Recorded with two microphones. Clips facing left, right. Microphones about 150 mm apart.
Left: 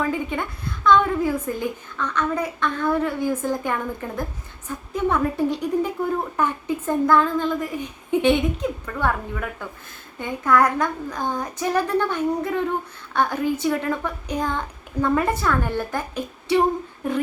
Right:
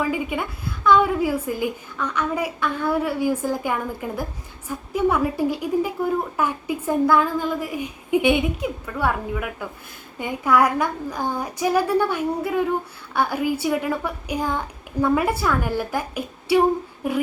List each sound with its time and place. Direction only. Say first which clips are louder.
0.0 s a woman's voice: even; 10° right (ahead or behind)